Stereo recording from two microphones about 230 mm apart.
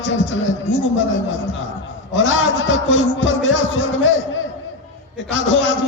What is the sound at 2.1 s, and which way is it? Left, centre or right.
A man's voice, left.